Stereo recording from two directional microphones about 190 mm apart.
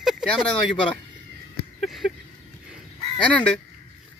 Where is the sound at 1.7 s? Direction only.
Centre (ahead or behind).